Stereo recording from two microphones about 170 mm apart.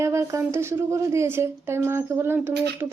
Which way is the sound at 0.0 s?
15° right (ahead or behind).